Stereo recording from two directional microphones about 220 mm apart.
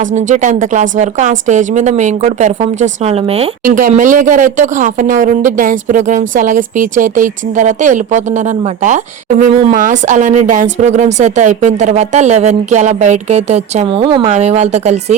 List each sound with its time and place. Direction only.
0.0 s speech: 35° right (ahead or behind)